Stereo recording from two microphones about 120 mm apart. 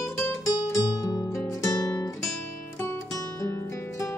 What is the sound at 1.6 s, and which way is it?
Guitar, 30° left (ahead or behind).